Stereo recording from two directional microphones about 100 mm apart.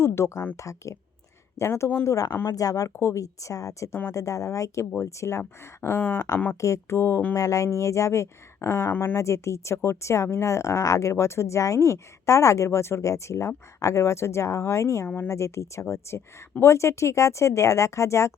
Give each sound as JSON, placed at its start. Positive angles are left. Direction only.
{"t": 0.0, "sound": "a woman's voice", "side_deg": 25}
{"t": 2.3, "sound": "speech", "side_deg": 20}
{"t": 2.6, "sound": "a woman's voice", "side_deg": 35}
{"t": 6.6, "sound": "speech", "side_deg": 30}
{"t": 7.3, "sound": "a woman's voice", "side_deg": 35}
{"t": 15.0, "sound": "speech", "side_deg": 15}
{"t": 15.3, "sound": "speech", "side_deg": 30}